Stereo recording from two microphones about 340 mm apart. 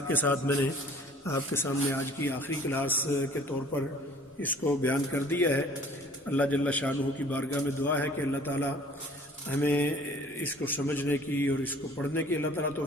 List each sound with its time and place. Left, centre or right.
0.1 s a man's voice: centre
4.4 s a man's voice: centre